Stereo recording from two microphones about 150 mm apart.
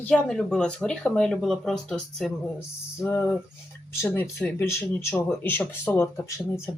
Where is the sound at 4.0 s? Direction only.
15° left (ahead or behind).